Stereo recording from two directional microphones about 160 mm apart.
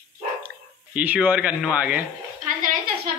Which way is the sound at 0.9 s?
10° right (ahead or behind).